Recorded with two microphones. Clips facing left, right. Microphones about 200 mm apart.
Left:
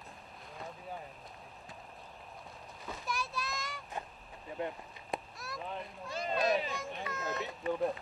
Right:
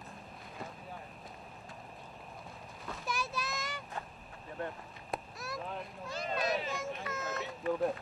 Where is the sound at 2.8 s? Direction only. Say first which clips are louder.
Right 1 dB; centre (ahead or behind).